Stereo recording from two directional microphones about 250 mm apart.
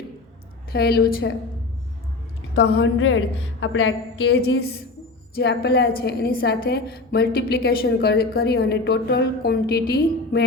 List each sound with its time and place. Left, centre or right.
0.7 s a woman's voice: left
2.6 s a woman's voice: left